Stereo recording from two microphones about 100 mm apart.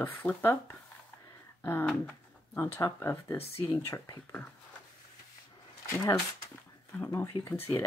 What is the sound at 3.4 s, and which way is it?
Speech, 55° left (ahead or behind).